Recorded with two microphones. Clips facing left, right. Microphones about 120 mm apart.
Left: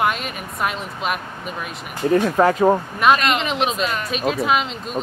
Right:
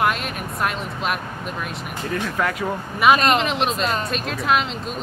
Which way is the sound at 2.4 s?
35° left (ahead or behind).